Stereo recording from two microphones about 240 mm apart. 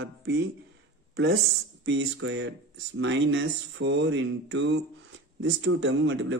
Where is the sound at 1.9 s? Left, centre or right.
Right.